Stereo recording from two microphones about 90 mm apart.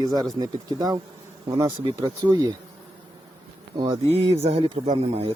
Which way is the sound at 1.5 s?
50° right (ahead or behind).